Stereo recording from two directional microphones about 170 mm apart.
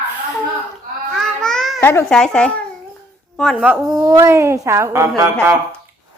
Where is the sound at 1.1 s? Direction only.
Centre (ahead or behind).